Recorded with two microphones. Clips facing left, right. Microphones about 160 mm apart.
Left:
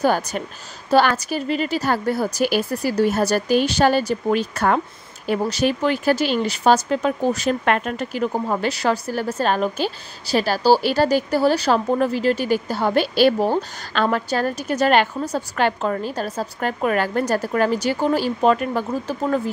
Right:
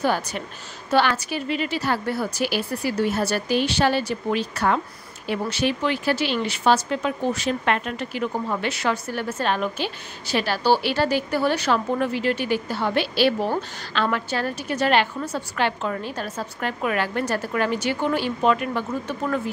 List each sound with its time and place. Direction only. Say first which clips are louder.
0.0 s a woman's voice: left 4 dB; 45° left (ahead or behind)